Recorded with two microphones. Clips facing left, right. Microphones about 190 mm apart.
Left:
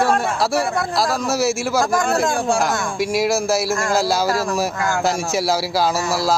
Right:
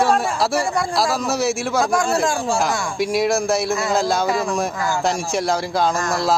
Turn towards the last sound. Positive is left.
turn(degrees=5)  # may be behind; listen again after turning